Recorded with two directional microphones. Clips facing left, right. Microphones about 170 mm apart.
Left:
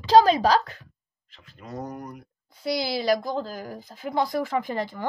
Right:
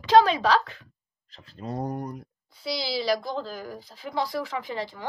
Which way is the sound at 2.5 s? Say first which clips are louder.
Left 4 dB; 50° left (ahead or behind).